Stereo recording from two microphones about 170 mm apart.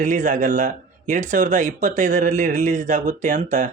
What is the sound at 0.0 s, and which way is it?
Speech, 50° right (ahead or behind).